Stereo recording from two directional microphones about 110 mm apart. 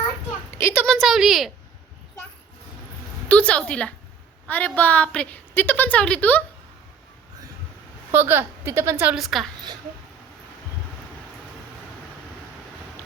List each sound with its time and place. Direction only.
0.5 s a woman's voice: 25° left (ahead or behind)
0.9 s a woman's voice: centre (ahead or behind)
3.2 s a woman's voice: 10° left (ahead or behind)
8.1 s a woman's voice: 20° right (ahead or behind)
9.1 s a woman's voice: centre (ahead or behind)